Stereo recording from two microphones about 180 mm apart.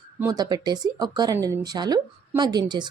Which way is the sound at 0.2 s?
20° right (ahead or behind).